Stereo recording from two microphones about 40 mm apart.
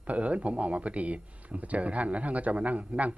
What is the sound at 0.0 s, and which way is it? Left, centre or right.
Speech, right.